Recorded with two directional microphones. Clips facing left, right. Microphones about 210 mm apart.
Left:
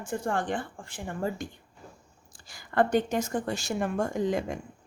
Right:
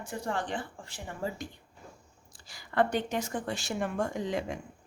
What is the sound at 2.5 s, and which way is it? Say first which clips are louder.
Speech: left 4 dB; 45° left (ahead or behind).